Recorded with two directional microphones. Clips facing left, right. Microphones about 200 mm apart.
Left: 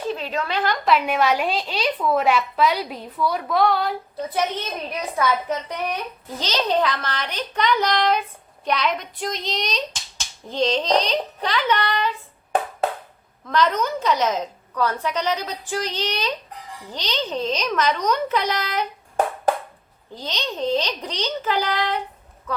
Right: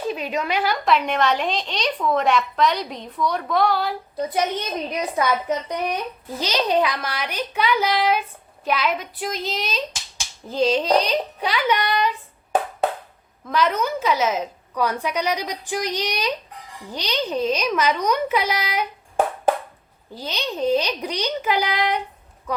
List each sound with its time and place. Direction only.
0.1 s a woman's voice: 15° right (ahead or behind)
0.9 s a woman's voice: 5° left (ahead or behind)
4.9 s speech: 15° right (ahead or behind)
13.4 s speech: 10° right (ahead or behind)
20.1 s speech: 10° right (ahead or behind)